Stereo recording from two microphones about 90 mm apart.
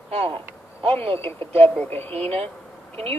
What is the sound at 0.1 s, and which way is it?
Speech, 90° right.